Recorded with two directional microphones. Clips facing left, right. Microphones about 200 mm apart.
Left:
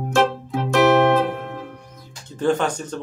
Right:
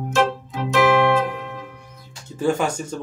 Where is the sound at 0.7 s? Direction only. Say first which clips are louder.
Left 2 dB; 45° left (ahead or behind).